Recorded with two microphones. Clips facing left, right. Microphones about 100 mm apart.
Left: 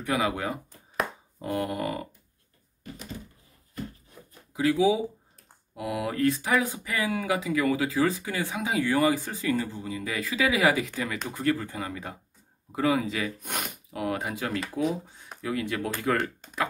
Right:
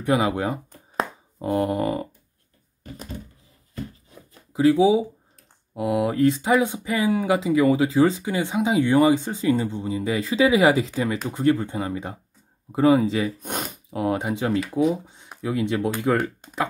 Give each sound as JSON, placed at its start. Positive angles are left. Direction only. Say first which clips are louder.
{"t": 0.0, "sound": "speech", "louder": "right 6 dB", "side_deg": -30}
{"t": 0.9, "sound": "a sound", "louder": "right 3 dB", "side_deg": -30}
{"t": 4.6, "sound": "speech", "louder": "right 6 dB", "side_deg": -30}